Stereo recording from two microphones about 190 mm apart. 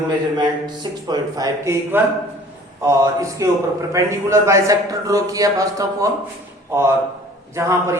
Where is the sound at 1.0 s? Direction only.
20° right (ahead or behind).